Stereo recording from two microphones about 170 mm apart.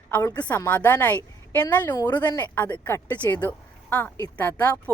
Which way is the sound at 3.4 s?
10° left (ahead or behind).